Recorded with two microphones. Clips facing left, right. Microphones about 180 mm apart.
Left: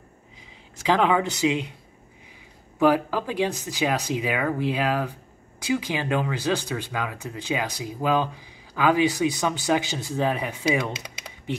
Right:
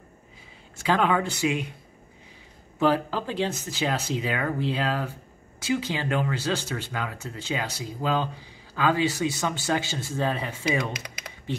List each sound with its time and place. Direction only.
0.8 s speech: 15° left (ahead or behind)
2.8 s speech: 10° left (ahead or behind)